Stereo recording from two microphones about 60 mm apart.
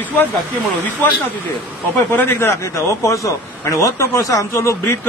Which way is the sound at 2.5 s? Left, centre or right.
Left.